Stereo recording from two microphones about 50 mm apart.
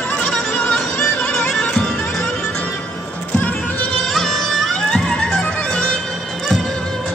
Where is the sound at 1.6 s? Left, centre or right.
Centre.